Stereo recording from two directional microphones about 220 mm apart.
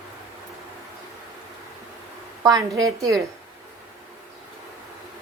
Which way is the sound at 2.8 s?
15° right (ahead or behind).